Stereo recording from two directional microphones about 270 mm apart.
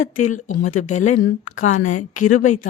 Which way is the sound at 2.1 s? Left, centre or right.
Left.